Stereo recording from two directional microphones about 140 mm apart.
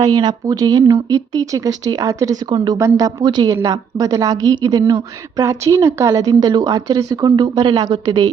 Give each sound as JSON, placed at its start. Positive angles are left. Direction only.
{"t": 0.0, "sound": "a woman's voice", "side_deg": -30}